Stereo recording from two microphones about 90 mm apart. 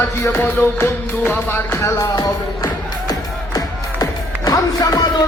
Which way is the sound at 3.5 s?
45° left (ahead or behind).